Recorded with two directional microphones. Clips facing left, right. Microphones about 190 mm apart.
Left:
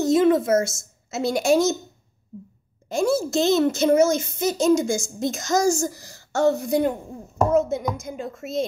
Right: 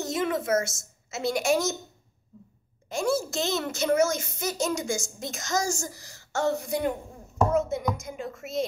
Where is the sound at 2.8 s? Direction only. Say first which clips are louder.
Left 5 dB; 35° left (ahead or behind).